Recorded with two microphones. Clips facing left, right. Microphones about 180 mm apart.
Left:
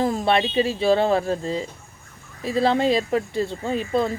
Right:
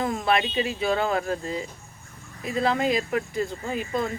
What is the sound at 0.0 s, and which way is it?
Speech, 30° left (ahead or behind).